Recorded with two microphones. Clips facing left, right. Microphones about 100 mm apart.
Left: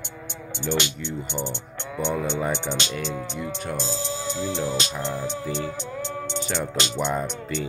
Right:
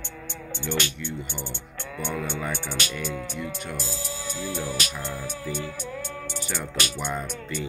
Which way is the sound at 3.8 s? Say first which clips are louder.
Left 5 dB; 30° left (ahead or behind).